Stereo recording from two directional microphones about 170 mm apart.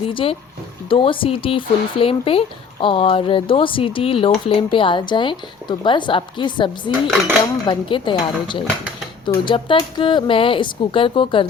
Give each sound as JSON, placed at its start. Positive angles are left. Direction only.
{"t": 0.1, "sound": "a woman's voice", "side_deg": 30}